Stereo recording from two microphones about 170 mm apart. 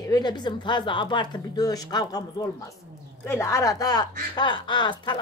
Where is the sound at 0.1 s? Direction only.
25° left (ahead or behind).